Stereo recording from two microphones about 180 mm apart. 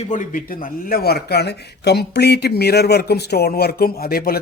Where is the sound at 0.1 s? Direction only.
50° left (ahead or behind).